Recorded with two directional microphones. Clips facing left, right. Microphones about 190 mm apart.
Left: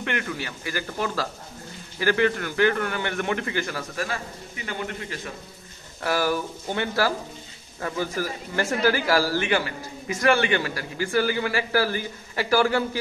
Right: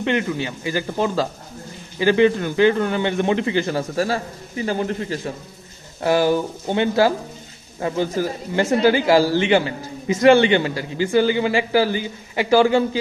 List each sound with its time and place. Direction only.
0.0 s speech: 20° right (ahead or behind)
5.9 s speech: 20° right (ahead or behind)